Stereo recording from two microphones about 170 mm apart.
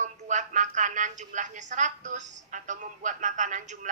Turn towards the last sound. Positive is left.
turn(degrees=-50)  # may be behind; listen again after turning